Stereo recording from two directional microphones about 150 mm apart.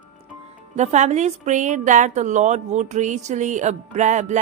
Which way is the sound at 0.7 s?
50° right (ahead or behind).